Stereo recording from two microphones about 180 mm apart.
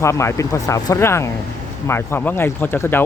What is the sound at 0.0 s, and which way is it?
Speech, 15° left (ahead or behind).